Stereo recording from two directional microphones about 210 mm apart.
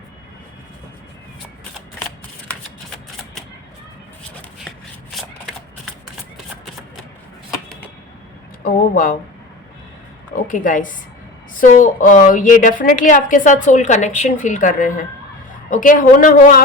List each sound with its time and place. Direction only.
8.6 s a woman's voice: 40° left (ahead or behind)
10.3 s a woman's voice: 40° left (ahead or behind)